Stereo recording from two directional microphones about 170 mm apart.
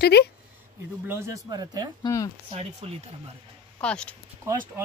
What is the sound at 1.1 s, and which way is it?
Speech, 20° right (ahead or behind).